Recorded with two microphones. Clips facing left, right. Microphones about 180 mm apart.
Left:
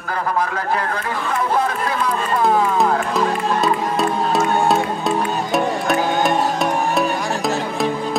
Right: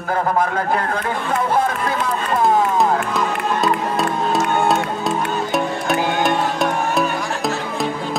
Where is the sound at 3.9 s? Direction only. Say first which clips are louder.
Left 1 dB; centre (ahead or behind).